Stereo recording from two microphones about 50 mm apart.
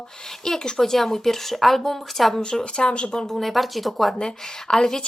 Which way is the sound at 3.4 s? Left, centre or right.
Centre.